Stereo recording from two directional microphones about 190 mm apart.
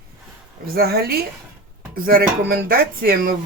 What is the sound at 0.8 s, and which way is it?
Speech, 55° right (ahead or behind).